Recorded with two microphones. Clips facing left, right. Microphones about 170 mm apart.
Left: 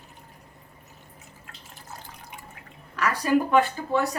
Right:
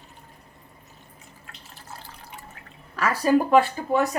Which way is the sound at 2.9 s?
35° right (ahead or behind).